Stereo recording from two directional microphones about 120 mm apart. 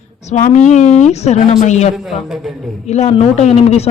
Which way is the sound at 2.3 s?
Centre (ahead or behind).